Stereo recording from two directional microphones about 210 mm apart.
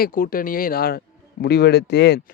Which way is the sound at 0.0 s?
40° left (ahead or behind).